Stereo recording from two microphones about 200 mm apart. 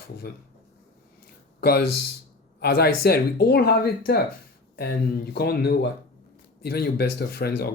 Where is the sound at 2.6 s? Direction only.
50° left (ahead or behind).